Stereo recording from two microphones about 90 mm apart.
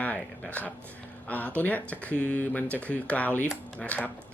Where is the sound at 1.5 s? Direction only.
20° left (ahead or behind).